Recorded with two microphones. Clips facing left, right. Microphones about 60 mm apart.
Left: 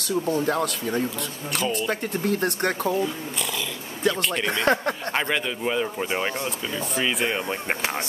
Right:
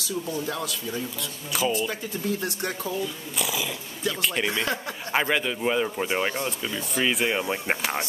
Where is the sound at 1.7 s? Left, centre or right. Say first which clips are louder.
Left 3 dB; left.